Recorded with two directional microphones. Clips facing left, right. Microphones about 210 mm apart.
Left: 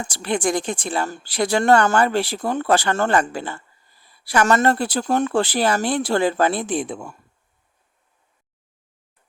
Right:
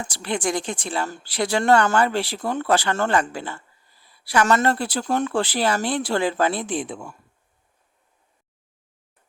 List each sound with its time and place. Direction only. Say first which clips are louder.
0.0 s speech: left 3 dB; 45° left (ahead or behind)